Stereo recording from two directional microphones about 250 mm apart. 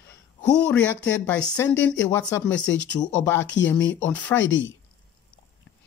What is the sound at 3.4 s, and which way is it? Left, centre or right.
Speech, left.